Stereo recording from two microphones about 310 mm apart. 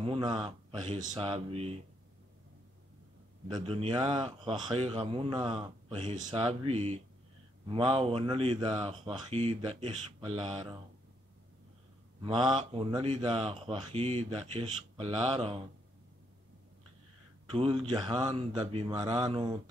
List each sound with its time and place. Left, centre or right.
0.0 s a man's voice: centre
3.4 s a man's voice: centre
12.2 s a man's voice: centre
17.5 s a man's voice: centre